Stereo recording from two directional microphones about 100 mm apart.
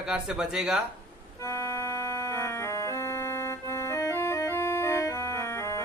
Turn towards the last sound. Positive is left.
turn(degrees=30)  # may be behind; listen again after turning